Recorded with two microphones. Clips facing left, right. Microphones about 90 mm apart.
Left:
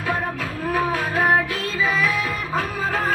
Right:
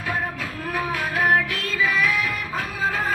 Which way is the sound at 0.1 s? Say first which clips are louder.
Left 2 dB; 40° left (ahead or behind).